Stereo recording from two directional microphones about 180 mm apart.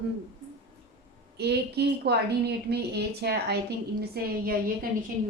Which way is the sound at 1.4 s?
65° right (ahead or behind).